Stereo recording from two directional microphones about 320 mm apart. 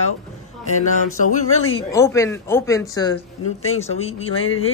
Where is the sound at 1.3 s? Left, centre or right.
Left.